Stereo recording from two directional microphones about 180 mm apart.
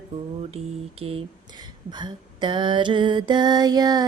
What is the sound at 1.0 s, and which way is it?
Speech, 35° right (ahead or behind).